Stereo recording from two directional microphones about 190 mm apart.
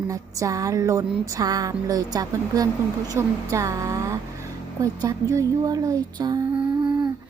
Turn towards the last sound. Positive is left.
turn(degrees=-20)  # may be behind; listen again after turning